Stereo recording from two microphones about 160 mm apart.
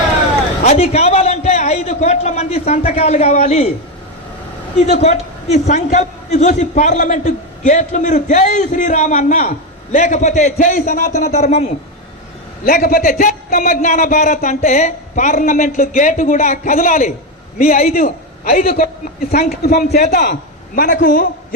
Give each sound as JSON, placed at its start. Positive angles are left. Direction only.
{"t": 0.6, "sound": "a man's voice", "side_deg": 40}
{"t": 4.9, "sound": "a man's voice", "side_deg": 45}
{"t": 12.6, "sound": "a man's voice", "side_deg": 65}
{"t": 17.6, "sound": "a man's voice", "side_deg": 65}
{"t": 20.1, "sound": "a man's voice", "side_deg": 85}